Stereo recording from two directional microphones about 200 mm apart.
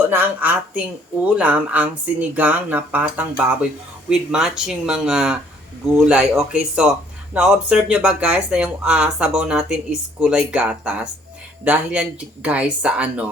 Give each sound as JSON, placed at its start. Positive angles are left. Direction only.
{"t": 0.1, "sound": "speech", "side_deg": -10}